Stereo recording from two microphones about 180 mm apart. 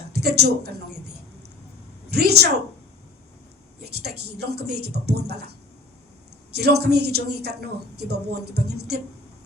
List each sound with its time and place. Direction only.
0.1 s speech: 65° right (ahead or behind)
2.0 s a woman's voice: 65° right (ahead or behind)
4.0 s speech: 65° right (ahead or behind)
6.5 s speech: 65° right (ahead or behind)